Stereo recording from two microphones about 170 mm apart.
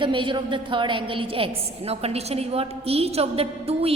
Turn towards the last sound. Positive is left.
turn(degrees=-35)  # may be behind; listen again after turning